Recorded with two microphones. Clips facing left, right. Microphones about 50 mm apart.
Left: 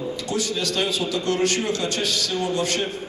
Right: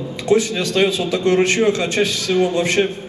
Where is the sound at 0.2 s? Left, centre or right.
Right.